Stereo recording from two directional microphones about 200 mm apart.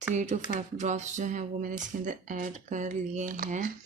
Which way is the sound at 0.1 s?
35° right (ahead or behind).